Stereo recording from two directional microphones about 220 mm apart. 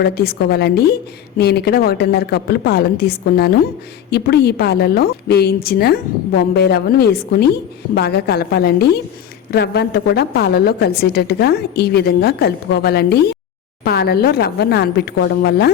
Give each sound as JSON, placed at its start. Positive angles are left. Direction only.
{"t": 0.0, "sound": "a woman's voice", "side_deg": 45}